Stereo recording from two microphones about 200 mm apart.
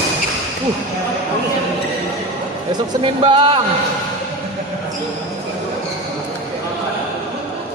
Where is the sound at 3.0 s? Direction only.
25° right (ahead or behind).